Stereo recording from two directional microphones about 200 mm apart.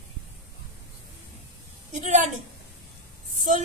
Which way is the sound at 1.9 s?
35° right (ahead or behind).